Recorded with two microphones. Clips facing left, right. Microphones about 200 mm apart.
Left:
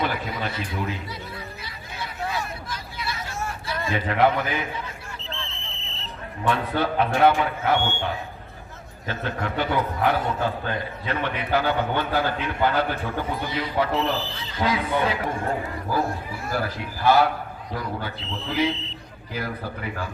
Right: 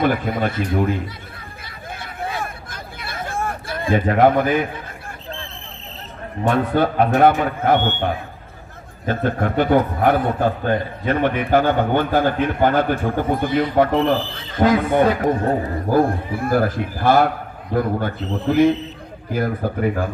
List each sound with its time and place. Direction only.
0.0 s a man's voice: 50° right (ahead or behind)
2.0 s vehicle: 50° right (ahead or behind)
7.2 s a man's voice: 50° right (ahead or behind)
15.4 s a man's voice: 35° right (ahead or behind)
15.9 s a man's voice: 55° right (ahead or behind)